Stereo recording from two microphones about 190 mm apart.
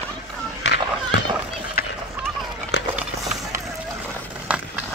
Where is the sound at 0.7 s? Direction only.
70° left (ahead or behind).